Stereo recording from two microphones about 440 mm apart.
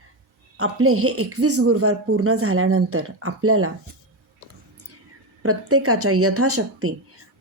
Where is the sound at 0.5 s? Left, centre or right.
Right.